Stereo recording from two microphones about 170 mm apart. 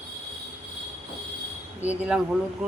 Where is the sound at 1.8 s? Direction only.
5° right (ahead or behind).